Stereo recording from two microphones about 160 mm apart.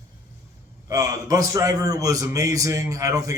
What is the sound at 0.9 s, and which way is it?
A man's voice, 20° right (ahead or behind).